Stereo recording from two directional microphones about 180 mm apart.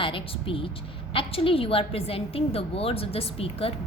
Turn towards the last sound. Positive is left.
turn(degrees=35)  # may be behind; listen again after turning